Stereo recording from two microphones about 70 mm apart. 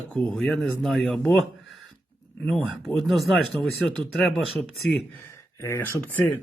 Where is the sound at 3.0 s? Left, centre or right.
Centre.